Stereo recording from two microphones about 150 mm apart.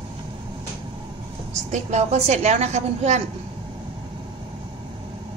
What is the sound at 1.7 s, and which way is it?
A woman's voice, 45° right (ahead or behind).